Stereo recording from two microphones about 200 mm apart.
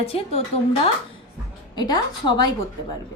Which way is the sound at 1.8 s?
20° left (ahead or behind).